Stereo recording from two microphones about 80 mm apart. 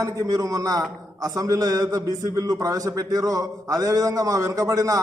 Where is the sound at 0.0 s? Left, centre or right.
Right.